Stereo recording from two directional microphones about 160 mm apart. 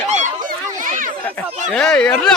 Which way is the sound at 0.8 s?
55° right (ahead or behind).